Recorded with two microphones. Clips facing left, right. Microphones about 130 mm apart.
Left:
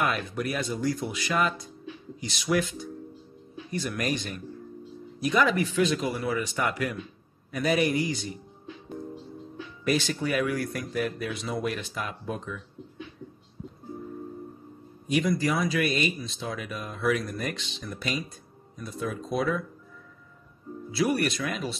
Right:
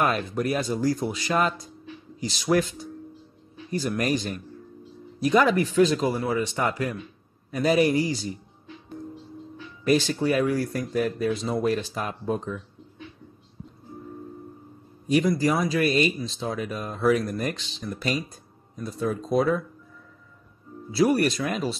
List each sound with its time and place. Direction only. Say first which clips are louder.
0.0 s speech: right 4 dB; 40° right (ahead or behind)
9.8 s speech: right 5 dB; 35° right (ahead or behind)
15.0 s speech: right 4 dB; 40° right (ahead or behind)
20.9 s speech: right 5 dB; 35° right (ahead or behind)